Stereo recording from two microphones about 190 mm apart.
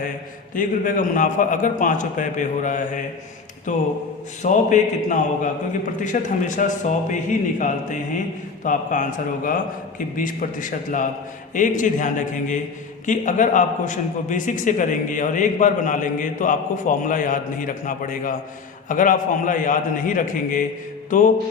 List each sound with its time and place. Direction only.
0.5 s a man's voice: 45° left (ahead or behind)